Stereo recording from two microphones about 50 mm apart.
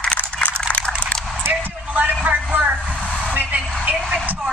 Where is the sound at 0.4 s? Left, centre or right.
Left.